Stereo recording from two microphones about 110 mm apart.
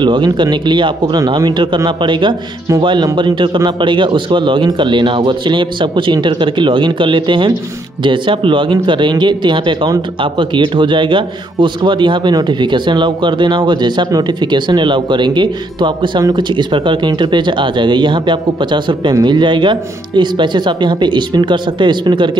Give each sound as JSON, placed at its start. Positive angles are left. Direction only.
{"t": 0.0, "sound": "a man's voice", "side_deg": -45}